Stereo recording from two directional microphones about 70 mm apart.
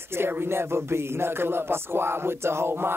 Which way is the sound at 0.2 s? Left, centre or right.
Right.